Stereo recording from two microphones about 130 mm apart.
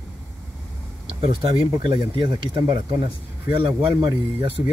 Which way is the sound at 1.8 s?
40° right (ahead or behind).